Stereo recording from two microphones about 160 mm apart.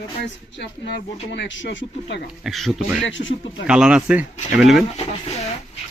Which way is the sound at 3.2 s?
65° left (ahead or behind).